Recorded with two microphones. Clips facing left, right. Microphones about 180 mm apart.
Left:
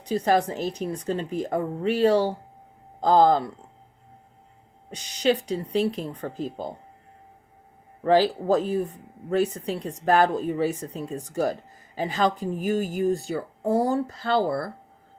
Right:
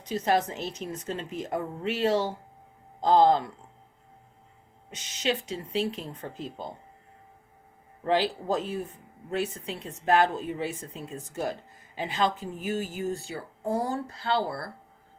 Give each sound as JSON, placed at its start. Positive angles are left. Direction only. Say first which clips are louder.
{"t": 0.0, "sound": "speech", "louder": "left 4 dB", "side_deg": 35}
{"t": 4.9, "sound": "speech", "louder": "left 7 dB", "side_deg": 35}
{"t": 8.0, "sound": "speech", "louder": "left 6 dB", "side_deg": 40}